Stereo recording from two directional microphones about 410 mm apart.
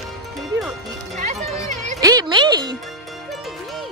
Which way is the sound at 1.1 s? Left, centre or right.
Centre.